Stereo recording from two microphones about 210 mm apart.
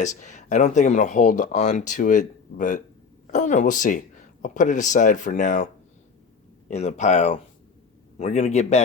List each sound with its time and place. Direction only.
0.0 s speech: 35° left (ahead or behind)
6.7 s speech: 30° left (ahead or behind)